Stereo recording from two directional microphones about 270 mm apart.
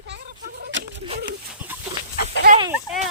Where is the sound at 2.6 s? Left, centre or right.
Centre.